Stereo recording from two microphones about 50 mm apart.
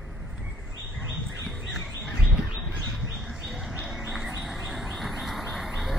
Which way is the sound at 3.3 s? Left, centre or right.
Centre.